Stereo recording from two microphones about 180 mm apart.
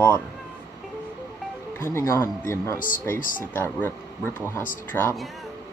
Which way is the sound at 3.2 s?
50° left (ahead or behind).